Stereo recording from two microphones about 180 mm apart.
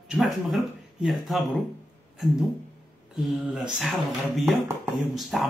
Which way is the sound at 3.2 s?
Centre (ahead or behind).